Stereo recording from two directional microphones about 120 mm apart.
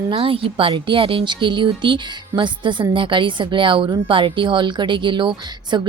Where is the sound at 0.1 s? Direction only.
50° right (ahead or behind).